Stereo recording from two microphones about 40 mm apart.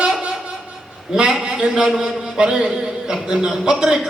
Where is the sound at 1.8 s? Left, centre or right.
Centre.